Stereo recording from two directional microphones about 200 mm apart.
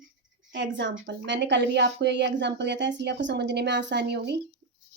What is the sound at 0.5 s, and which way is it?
A woman's voice, 60° right (ahead or behind).